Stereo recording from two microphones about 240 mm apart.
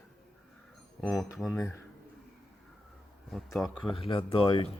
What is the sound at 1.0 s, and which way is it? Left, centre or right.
Speech, centre.